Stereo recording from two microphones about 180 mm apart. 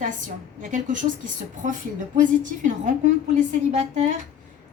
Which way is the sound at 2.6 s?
45° right (ahead or behind).